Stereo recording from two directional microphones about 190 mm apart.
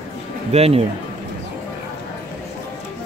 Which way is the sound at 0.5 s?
30° right (ahead or behind).